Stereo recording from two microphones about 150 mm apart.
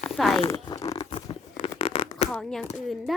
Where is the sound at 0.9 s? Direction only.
35° left (ahead or behind).